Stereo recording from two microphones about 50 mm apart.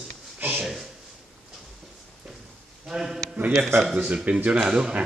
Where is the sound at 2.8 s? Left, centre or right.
Centre.